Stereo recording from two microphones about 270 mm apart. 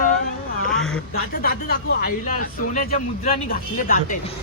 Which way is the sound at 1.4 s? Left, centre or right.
Left.